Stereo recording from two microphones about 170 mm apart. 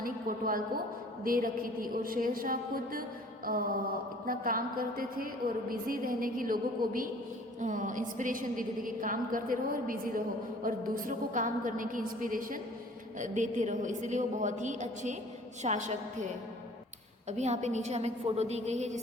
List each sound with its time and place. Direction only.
0.0 s a woman's voice: 55° right (ahead or behind)
17.2 s a woman's voice: 40° right (ahead or behind)